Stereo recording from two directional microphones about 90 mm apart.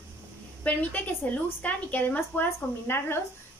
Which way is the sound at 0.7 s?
15° left (ahead or behind).